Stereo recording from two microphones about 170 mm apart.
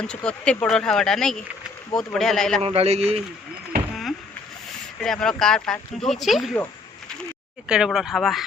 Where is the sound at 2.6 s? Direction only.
35° right (ahead or behind).